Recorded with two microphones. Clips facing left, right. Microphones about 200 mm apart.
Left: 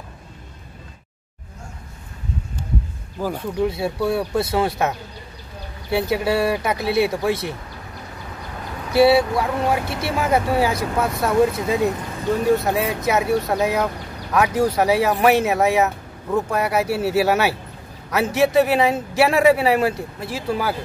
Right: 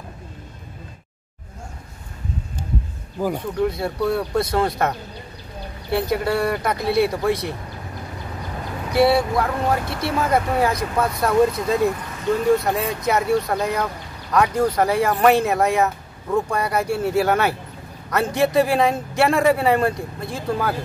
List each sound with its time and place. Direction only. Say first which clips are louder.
3.2 s speech: right 2 dB; 15° right (ahead or behind)
3.6 s a man's voice: even; 5° left (ahead or behind)
8.9 s a man's voice: left 2 dB; 5° left (ahead or behind)
9.8 s speech: even; 25° left (ahead or behind)
10.1 s a man's voice: left 1 dB; 5° left (ahead or behind)